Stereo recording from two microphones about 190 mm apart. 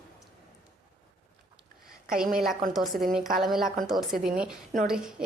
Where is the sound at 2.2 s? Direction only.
Centre (ahead or behind).